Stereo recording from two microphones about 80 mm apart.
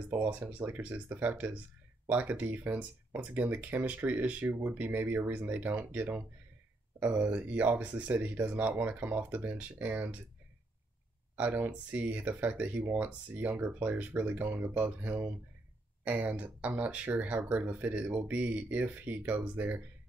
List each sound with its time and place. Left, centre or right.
0.1 s speech: right
11.3 s speech: right